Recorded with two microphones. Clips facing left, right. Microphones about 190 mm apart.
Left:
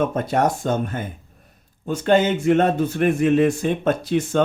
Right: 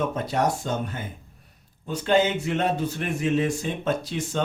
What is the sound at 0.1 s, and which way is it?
Speech, 55° left (ahead or behind).